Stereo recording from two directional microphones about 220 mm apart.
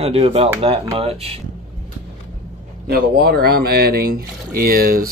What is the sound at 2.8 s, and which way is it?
Speech, 45° right (ahead or behind).